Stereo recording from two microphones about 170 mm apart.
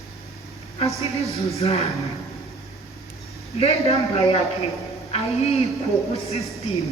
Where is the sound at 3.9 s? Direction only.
35° left (ahead or behind).